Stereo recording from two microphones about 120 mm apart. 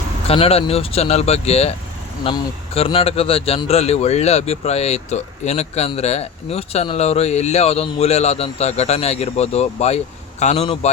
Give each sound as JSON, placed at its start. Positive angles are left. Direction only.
{"t": 0.3, "sound": "speech", "side_deg": 55}